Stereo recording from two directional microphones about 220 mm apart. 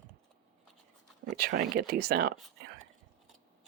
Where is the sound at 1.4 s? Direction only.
45° right (ahead or behind).